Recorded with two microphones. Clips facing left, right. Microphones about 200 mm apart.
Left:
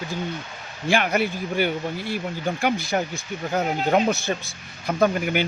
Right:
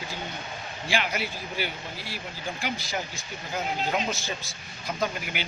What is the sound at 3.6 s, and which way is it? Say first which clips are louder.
Speech: left 8 dB; 60° left (ahead or behind).